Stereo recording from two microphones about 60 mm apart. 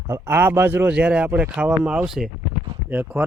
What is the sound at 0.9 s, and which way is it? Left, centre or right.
Speech, centre.